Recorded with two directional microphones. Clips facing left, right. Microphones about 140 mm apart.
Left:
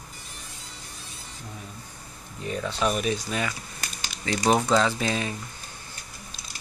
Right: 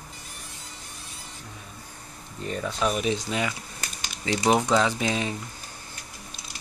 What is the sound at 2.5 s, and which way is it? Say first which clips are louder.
Speech: even; centre (ahead or behind).